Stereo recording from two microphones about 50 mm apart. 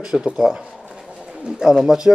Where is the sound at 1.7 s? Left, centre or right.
Centre.